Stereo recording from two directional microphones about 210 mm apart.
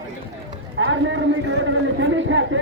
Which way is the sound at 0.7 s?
65° right (ahead or behind).